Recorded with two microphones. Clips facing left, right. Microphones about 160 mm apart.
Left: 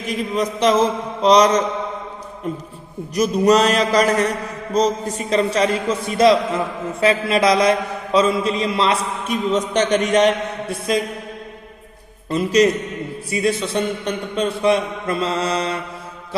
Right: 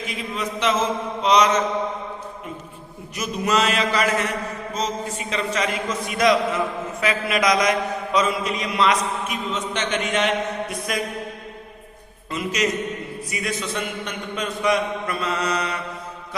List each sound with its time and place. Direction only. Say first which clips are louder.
0.1 s a man's voice: left 10 dB; 40° left (ahead or behind)
3.2 s a man's voice: left 8 dB; 35° left (ahead or behind)
12.3 s a man's voice: left 8 dB; 35° left (ahead or behind)